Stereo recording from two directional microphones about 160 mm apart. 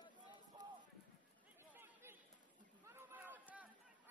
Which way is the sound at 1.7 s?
15° right (ahead or behind).